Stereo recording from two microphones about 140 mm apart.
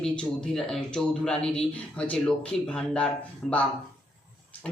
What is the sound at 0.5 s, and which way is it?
Speech, 5° left (ahead or behind).